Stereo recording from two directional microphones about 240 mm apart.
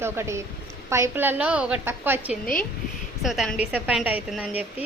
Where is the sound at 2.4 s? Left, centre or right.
Left.